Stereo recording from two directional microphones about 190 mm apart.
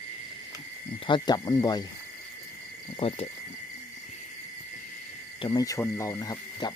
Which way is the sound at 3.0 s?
30° left (ahead or behind).